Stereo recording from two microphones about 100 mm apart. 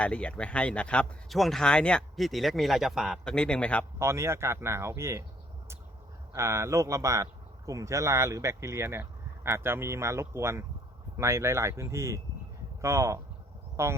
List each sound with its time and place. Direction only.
0.0 s speech: 10° left (ahead or behind); by 3.2 s 5° right (ahead or behind)
3.2 s speech: 10° left (ahead or behind)
3.9 s speech: 30° right (ahead or behind)
6.3 s speech: 30° right (ahead or behind)